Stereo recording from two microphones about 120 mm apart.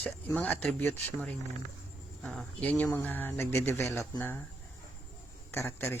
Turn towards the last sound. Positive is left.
turn(degrees=20)  # may be behind; listen again after turning